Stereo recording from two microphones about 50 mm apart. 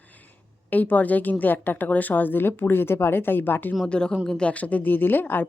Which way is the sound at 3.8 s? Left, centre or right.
Centre.